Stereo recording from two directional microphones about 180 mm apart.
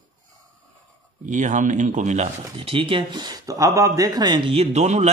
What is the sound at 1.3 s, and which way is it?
Speech, 45° right (ahead or behind).